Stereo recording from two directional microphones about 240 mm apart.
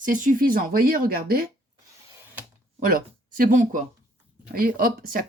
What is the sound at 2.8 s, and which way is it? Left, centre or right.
Speech, right.